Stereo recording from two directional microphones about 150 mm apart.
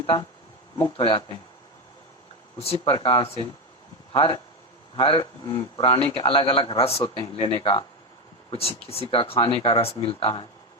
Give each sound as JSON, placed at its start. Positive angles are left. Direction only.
{"t": 0.0, "sound": "speech", "side_deg": 30}
{"t": 2.6, "sound": "speech", "side_deg": 40}
{"t": 5.5, "sound": "speech", "side_deg": 25}
{"t": 5.8, "sound": "speech", "side_deg": 40}